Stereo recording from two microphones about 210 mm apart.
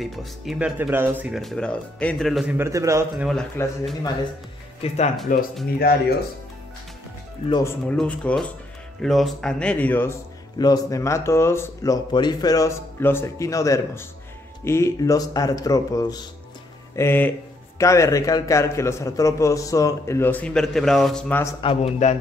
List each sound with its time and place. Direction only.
0.0 s speech: centre (ahead or behind)
3.3 s speech: centre (ahead or behind)
4.8 s speech: 30° left (ahead or behind)
5.8 s speech: 45° left (ahead or behind)
7.4 s a man's voice: 20° left (ahead or behind)
7.9 s a man's voice: 5° left (ahead or behind)
21.5 s a man's voice: 25° left (ahead or behind)